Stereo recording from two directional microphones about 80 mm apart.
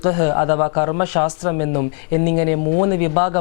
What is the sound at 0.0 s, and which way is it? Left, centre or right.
Speech, centre.